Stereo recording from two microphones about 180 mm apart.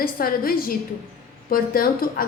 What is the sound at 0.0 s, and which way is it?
A woman's voice, 55° left (ahead or behind).